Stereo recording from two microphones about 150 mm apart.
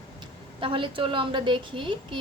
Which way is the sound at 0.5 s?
35° right (ahead or behind).